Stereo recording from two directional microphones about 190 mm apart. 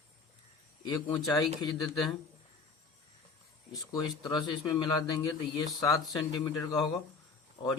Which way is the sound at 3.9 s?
20° left (ahead or behind).